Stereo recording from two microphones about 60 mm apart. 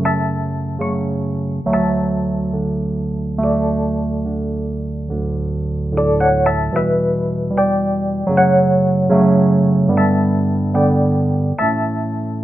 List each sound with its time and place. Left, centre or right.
0.0 s music: centre
1.7 s electric piano: centre
3.3 s music: centre
5.9 s music: centre
8.5 s electric piano: centre